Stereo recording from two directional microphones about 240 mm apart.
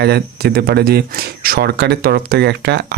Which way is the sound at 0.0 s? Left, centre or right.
Right.